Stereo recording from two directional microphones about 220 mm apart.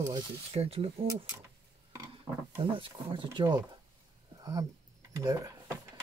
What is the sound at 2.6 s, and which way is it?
Speech, 25° right (ahead or behind).